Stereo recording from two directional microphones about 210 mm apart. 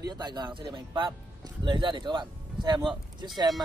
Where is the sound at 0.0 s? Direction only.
20° right (ahead or behind).